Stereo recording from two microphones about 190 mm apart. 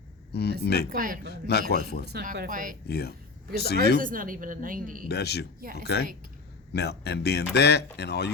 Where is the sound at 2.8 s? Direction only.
55° left (ahead or behind).